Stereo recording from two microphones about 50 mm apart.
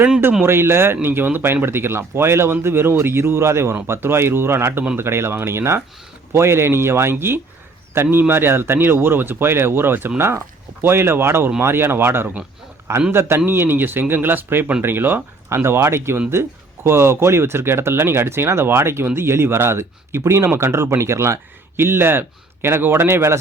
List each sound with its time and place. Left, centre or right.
0.4 s speech: right
21.0 s speech: right
21.8 s speech: right